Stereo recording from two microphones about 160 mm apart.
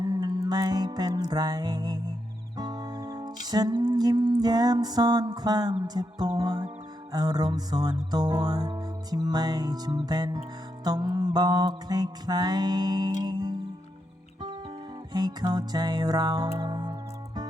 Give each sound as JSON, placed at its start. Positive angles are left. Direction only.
{"t": 0.0, "sound": "music", "side_deg": -25}
{"t": 15.1, "sound": "music", "side_deg": -25}